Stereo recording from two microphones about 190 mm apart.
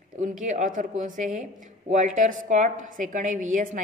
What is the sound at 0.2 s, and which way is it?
A woman's voice, 40° right (ahead or behind).